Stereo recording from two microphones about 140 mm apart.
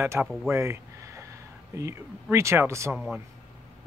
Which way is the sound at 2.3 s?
20° right (ahead or behind).